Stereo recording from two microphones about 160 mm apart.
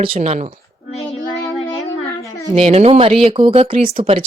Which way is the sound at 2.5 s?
40° right (ahead or behind).